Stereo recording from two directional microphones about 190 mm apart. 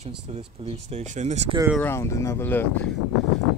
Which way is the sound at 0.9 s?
35° right (ahead or behind).